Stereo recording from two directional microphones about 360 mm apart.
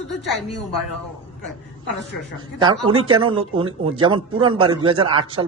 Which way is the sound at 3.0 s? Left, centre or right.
Centre.